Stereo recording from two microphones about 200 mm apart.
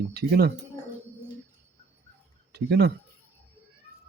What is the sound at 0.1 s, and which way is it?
Speech, 50° right (ahead or behind).